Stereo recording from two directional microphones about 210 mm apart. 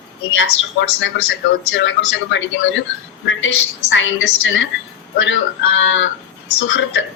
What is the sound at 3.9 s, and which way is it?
Speech, 65° left (ahead or behind).